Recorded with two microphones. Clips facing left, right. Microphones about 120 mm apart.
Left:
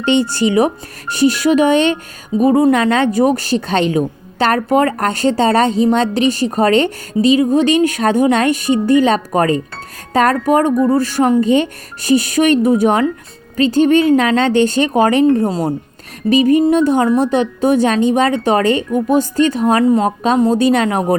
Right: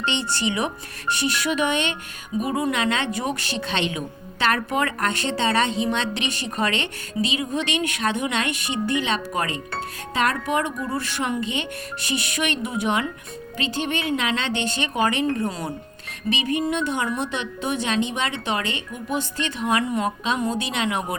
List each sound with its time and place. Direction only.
0.0 s a woman's voice: 40° left (ahead or behind)